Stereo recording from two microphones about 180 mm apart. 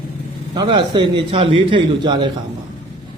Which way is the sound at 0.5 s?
25° right (ahead or behind).